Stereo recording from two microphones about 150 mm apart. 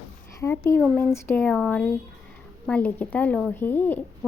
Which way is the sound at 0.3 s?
15° left (ahead or behind).